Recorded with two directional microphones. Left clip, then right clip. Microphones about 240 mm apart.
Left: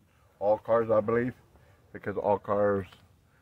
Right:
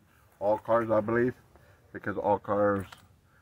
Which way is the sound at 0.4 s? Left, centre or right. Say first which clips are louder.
Left 1 dB; centre.